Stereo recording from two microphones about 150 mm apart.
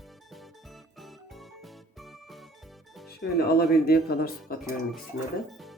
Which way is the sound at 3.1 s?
90° left.